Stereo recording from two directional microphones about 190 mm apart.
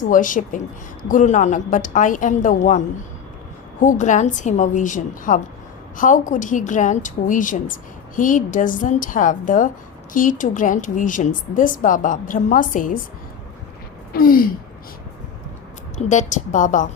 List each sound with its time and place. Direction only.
0.0 s a woman's voice: 45° left (ahead or behind)
14.1 s a woman's voice: 50° left (ahead or behind)
16.0 s a woman's voice: 40° left (ahead or behind)